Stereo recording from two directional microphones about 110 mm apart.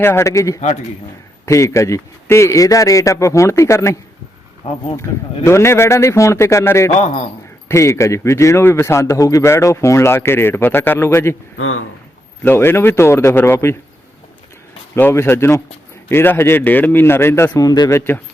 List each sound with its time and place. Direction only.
0.0 s a man's voice: 20° left (ahead or behind)
4.6 s speech: 80° left
5.4 s a man's voice: 25° left (ahead or behind)
12.4 s a man's voice: 20° left (ahead or behind)
14.9 s a man's voice: 20° left (ahead or behind)